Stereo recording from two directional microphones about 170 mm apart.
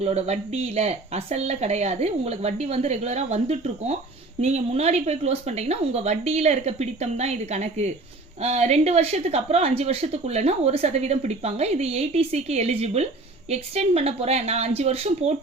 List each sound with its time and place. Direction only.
0.0 s a woman's voice: 40° right (ahead or behind)